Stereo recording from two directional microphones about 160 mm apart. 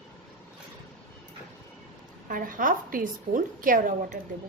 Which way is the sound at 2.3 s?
60° right (ahead or behind).